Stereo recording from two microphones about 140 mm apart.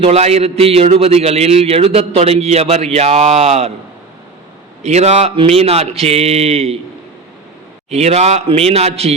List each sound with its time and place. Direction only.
0.0 s a man's voice: 50° right (ahead or behind)
4.8 s a man's voice: 50° right (ahead or behind)
7.9 s a man's voice: 50° right (ahead or behind)